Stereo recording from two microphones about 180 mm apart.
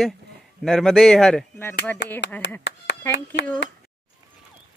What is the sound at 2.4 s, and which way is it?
Speech, 80° left.